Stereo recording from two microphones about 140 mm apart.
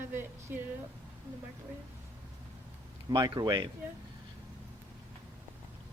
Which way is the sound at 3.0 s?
30° right (ahead or behind).